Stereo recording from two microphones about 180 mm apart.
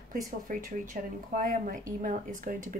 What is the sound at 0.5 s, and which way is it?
Speech, 50° right (ahead or behind).